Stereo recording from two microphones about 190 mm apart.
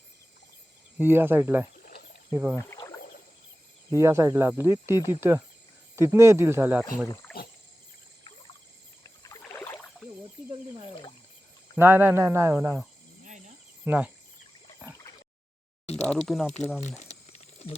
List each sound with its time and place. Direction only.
0.9 s speech: 10° right (ahead or behind)
1.7 s cricket: 50° left (ahead or behind)
2.3 s speech: 10° right (ahead or behind)
2.6 s rowboat: 20° left (ahead or behind)
3.9 s speech: 15° right (ahead or behind)
7.3 s a sound: 5° left (ahead or behind)
9.0 s rowboat: 20° left (ahead or behind)
11.8 s speech: 10° right (ahead or behind)
13.2 s cricket: 40° right (ahead or behind)
13.8 s speech: 10° right (ahead or behind)
16.0 s speech: centre (ahead or behind)